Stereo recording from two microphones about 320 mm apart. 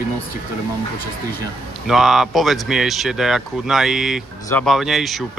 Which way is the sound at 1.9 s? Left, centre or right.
Centre.